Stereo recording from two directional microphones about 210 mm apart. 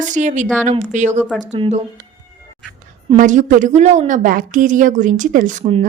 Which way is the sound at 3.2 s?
35° right (ahead or behind).